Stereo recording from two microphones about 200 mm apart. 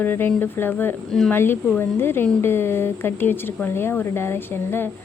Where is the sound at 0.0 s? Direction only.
10° left (ahead or behind).